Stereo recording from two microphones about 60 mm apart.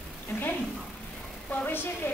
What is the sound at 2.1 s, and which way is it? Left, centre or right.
Speech, left.